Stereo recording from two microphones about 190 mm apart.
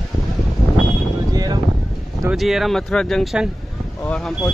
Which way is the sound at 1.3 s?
20° right (ahead or behind).